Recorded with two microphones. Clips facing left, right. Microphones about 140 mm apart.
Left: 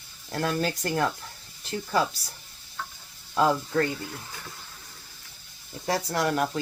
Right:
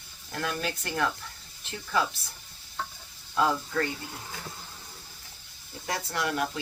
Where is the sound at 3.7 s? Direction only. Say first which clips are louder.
Left 4 dB; 30° left (ahead or behind).